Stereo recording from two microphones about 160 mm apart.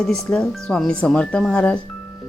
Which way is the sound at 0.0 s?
5° left (ahead or behind).